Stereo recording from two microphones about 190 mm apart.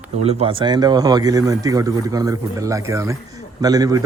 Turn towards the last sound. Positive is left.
turn(degrees=-20)  # may be behind; listen again after turning